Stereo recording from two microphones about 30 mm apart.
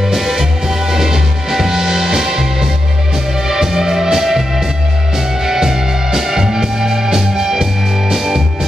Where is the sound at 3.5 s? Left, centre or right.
Centre.